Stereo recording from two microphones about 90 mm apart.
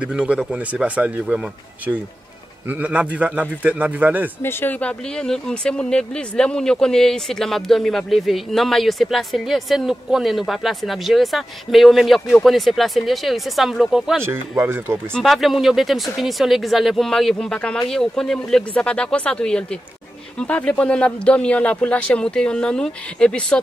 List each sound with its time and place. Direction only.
0.0 s a man's voice: 10° right (ahead or behind)
2.7 s a man's voice: 15° right (ahead or behind)
4.4 s speech: 25° left (ahead or behind); by 14.1 s 5° right (ahead or behind)
14.2 s speech: 25° right (ahead or behind)
15.1 s speech: centre (ahead or behind)